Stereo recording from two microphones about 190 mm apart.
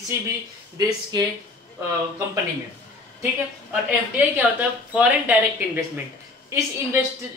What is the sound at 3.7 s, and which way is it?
Speech, 10° right (ahead or behind).